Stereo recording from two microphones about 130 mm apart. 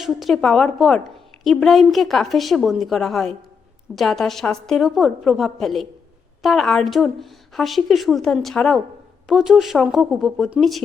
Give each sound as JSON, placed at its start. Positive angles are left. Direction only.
{"t": 0.0, "sound": "a woman's voice", "side_deg": 0}